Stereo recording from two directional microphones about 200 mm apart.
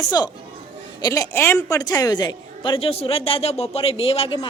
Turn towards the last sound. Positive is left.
turn(degrees=25)  # may be behind; listen again after turning